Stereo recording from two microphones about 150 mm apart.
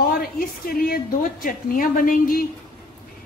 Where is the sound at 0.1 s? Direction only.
75° left (ahead or behind).